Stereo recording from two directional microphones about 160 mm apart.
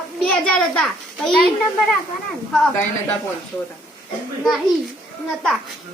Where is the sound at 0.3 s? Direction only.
5° left (ahead or behind).